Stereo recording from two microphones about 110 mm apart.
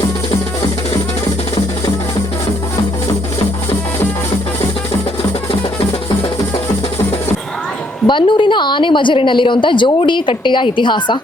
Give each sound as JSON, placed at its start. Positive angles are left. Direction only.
{"t": 8.0, "sound": "a woman's voice", "side_deg": 45}